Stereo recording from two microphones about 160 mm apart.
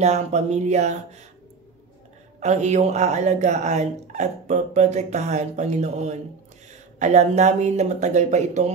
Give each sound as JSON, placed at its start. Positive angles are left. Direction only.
{"t": 0.0, "sound": "speech", "side_deg": -45}
{"t": 2.4, "sound": "speech", "side_deg": -45}